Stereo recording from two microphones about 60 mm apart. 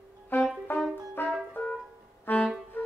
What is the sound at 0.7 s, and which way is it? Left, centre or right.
Brass instrument, left.